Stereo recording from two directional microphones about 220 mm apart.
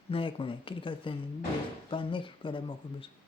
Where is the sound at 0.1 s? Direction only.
25° left (ahead or behind).